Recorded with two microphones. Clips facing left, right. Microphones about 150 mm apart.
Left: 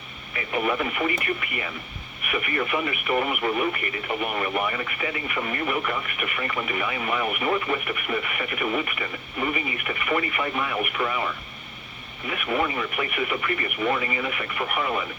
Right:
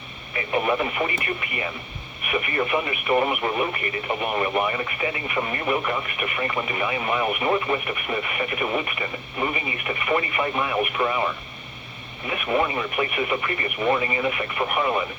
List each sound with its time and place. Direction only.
0.3 s speech: 25° right (ahead or behind)
12.3 s speech: 25° right (ahead or behind)